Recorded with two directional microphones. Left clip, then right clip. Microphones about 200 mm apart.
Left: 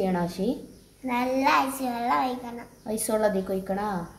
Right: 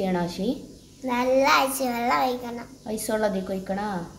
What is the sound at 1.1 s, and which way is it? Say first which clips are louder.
A child's voice: right 3 dB; 30° right (ahead or behind).